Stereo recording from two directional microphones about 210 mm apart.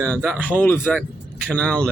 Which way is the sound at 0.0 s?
5° left (ahead or behind).